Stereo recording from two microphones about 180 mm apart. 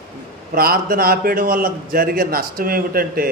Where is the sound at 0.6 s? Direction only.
55° right (ahead or behind).